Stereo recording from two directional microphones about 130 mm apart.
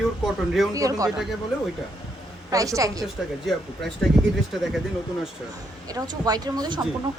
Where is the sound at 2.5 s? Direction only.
25° right (ahead or behind).